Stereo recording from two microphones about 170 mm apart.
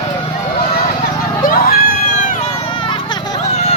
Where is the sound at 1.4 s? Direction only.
60° left (ahead or behind).